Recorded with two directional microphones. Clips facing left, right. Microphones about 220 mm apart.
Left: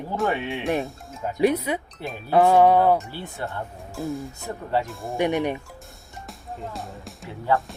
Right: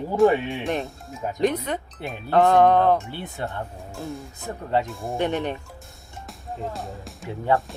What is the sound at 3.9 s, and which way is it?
Speech, centre (ahead or behind).